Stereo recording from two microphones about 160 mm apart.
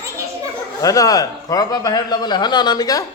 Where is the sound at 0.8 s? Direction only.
20° left (ahead or behind).